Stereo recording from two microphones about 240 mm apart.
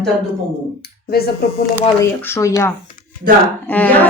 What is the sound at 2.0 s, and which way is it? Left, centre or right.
Speech, centre.